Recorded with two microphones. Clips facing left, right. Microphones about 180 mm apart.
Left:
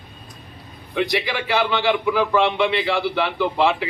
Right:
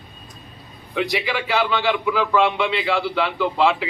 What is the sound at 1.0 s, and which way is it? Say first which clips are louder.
A man's voice: left 1 dB; centre (ahead or behind).